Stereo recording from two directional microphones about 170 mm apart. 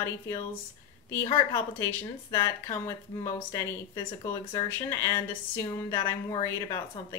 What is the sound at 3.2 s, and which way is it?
A woman's voice, 20° left (ahead or behind).